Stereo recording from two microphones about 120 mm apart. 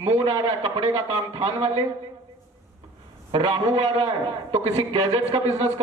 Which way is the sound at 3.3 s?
45° right (ahead or behind).